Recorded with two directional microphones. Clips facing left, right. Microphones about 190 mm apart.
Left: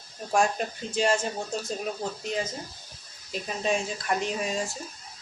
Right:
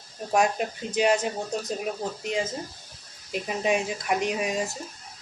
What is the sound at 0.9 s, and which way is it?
Speech, 20° right (ahead or behind).